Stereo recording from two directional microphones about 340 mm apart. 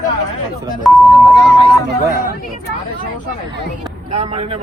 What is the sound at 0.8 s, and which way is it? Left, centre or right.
Speech, centre.